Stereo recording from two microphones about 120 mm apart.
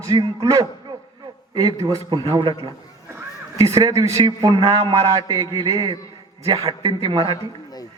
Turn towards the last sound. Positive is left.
turn(degrees=-40)  # may be behind; listen again after turning